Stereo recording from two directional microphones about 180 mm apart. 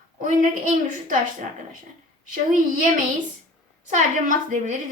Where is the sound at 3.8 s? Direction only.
45° right (ahead or behind).